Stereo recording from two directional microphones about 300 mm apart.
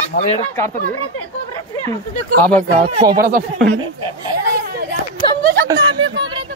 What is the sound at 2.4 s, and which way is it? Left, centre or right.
Speech, centre.